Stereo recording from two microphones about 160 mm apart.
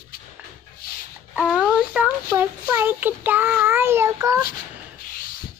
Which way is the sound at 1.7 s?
5° right (ahead or behind).